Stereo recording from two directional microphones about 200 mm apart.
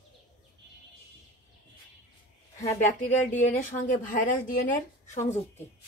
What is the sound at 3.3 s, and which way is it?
Speech, 40° left (ahead or behind).